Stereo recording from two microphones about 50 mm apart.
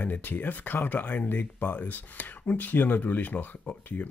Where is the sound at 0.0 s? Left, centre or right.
Left.